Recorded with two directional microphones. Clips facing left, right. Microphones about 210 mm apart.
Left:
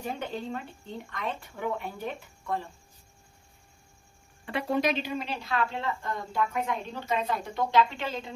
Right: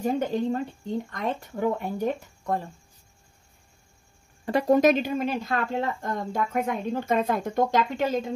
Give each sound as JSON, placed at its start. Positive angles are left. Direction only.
{"t": 0.0, "sound": "speech", "side_deg": -40}
{"t": 4.5, "sound": "speech", "side_deg": -40}